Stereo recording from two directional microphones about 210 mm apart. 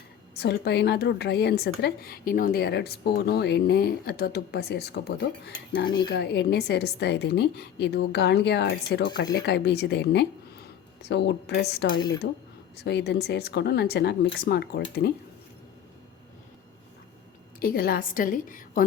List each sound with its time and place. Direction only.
0.3 s a woman's voice: 50° left (ahead or behind)
17.6 s a woman's voice: 45° left (ahead or behind)